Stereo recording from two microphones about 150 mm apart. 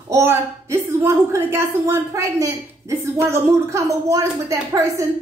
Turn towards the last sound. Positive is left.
turn(degrees=-20)  # may be behind; listen again after turning